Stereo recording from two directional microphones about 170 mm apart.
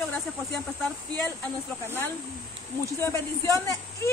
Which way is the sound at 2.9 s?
15° left (ahead or behind).